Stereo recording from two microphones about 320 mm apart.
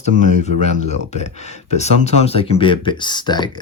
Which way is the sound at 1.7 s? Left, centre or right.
Left.